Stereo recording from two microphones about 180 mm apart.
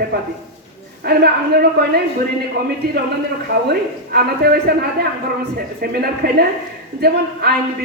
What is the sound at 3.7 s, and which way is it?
A man's voice, 65° right (ahead or behind).